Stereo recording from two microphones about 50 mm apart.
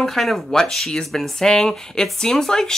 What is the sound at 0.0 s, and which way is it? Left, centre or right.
Speech, centre.